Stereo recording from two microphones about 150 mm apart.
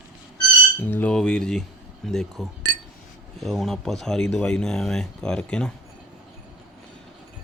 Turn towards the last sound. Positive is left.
turn(degrees=5)  # may be behind; listen again after turning